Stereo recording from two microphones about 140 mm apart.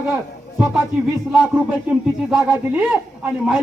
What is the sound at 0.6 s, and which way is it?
Speech, centre (ahead or behind).